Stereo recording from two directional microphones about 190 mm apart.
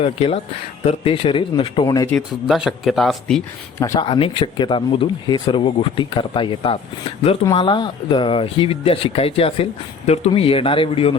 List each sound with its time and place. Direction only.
0.0 s speech: 30° left (ahead or behind)
2.0 s speech: centre (ahead or behind)
3.8 s speech: 15° left (ahead or behind)
4.1 s speech: 25° left (ahead or behind)